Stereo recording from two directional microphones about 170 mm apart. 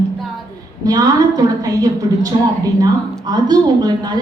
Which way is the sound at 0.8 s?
20° right (ahead or behind).